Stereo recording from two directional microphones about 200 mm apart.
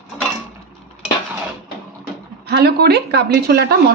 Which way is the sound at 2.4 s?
55° right (ahead or behind).